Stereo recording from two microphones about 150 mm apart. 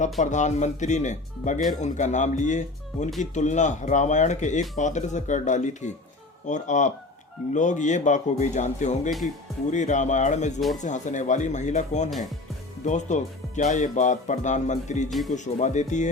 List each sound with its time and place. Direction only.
0.0 s speech: 55° left (ahead or behind)